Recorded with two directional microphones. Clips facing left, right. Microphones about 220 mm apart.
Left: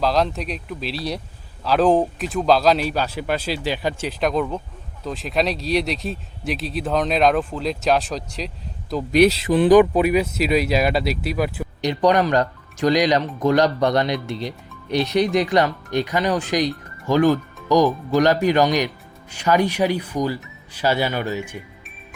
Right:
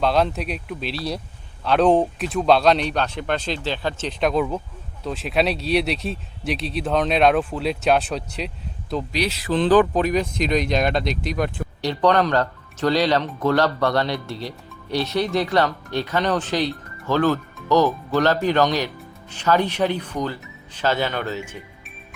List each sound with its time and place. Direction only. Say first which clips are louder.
0.0 s speech: even; centre (ahead or behind)
9.5 s speech: right 1 dB; 15° left (ahead or behind)